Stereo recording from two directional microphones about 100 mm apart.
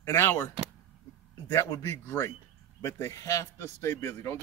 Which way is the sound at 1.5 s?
30° left (ahead or behind).